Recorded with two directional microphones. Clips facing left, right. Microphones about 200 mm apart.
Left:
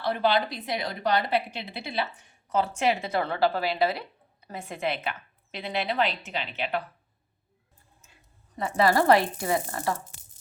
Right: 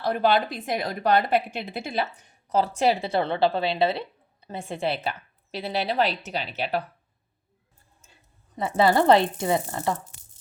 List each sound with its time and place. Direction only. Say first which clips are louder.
0.0 s a woman's voice: right 3 dB; 45° right (ahead or behind)
8.5 s speech: right 2 dB; 25° right (ahead or behind)